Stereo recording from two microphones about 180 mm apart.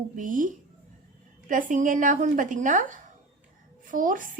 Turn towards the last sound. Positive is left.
turn(degrees=-50)  # may be behind; listen again after turning